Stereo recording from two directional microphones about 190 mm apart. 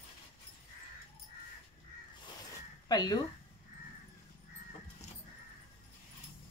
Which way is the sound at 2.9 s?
20° left (ahead or behind).